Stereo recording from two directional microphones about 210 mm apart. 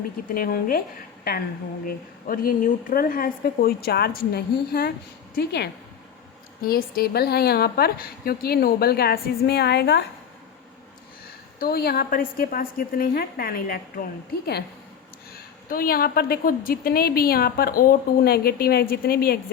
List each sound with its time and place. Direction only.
0.3 s a woman's voice: 45° left (ahead or behind)
1.9 s a woman's voice: 45° left (ahead or behind)
11.6 s a woman's voice: 45° left (ahead or behind)
15.7 s a woman's voice: 45° left (ahead or behind)